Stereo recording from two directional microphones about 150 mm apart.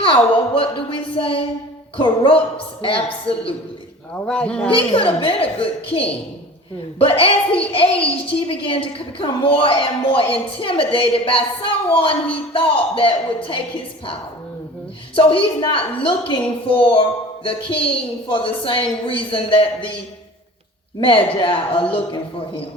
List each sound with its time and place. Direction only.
0.0 s a woman's voice: 35° left (ahead or behind)
4.1 s a man's voice: 5° left (ahead or behind)
4.7 s a woman's voice: 35° left (ahead or behind)
15.1 s a woman's voice: 35° left (ahead or behind)
21.0 s a woman's voice: 35° left (ahead or behind)